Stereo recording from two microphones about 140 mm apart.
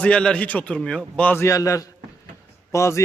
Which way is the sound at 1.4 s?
25° left (ahead or behind).